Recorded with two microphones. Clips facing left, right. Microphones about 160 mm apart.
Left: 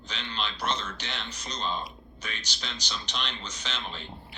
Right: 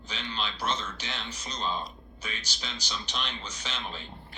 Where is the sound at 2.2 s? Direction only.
5° right (ahead or behind).